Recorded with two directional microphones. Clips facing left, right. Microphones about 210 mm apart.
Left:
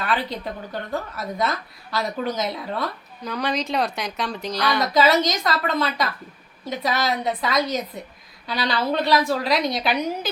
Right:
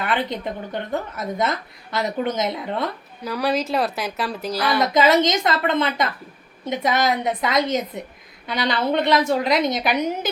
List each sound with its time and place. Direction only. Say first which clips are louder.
0.0 s speech: right 2 dB; 20° right (ahead or behind)
3.2 s speech: right 3 dB; 5° right (ahead or behind)
4.8 s speech: right 2 dB; 20° right (ahead or behind)